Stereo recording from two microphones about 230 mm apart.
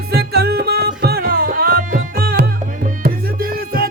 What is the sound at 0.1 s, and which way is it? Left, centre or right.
Music, right.